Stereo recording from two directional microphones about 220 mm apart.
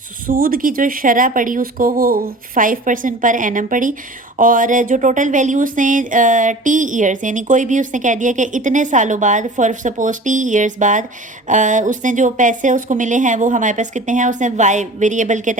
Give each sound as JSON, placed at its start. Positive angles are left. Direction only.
{"t": 0.3, "sound": "speech", "side_deg": -40}